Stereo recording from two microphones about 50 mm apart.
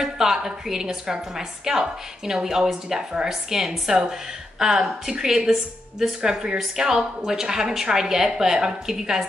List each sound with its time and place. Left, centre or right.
0.0 s a woman's voice: centre
2.6 s a woman's voice: centre